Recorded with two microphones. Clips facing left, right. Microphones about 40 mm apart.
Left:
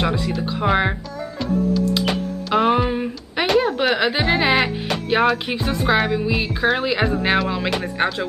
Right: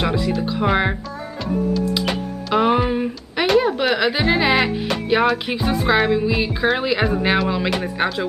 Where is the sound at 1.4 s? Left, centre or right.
Centre.